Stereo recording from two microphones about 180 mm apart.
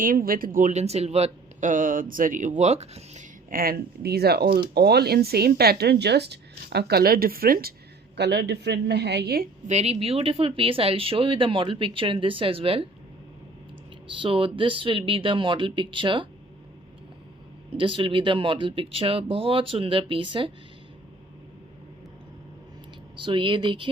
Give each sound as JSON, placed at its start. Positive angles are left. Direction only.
{"t": 0.0, "sound": "speech", "side_deg": -50}
{"t": 3.5, "sound": "speech", "side_deg": -55}
{"t": 8.1, "sound": "a woman's voice", "side_deg": -70}
{"t": 9.6, "sound": "speech", "side_deg": -35}
{"t": 14.2, "sound": "speech", "side_deg": -30}
{"t": 17.7, "sound": "speech", "side_deg": -30}
{"t": 23.2, "sound": "speech", "side_deg": -25}